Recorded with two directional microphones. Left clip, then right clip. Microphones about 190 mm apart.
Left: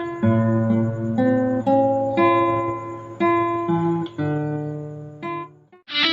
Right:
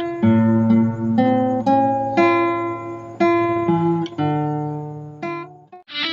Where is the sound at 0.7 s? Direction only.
35° right (ahead or behind).